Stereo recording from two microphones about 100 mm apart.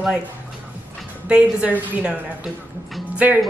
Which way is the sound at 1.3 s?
10° right (ahead or behind).